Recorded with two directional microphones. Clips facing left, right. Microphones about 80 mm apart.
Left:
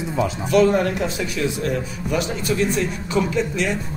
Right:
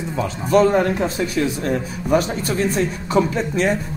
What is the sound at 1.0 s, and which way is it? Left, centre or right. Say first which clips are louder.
Speech: right 3 dB; right.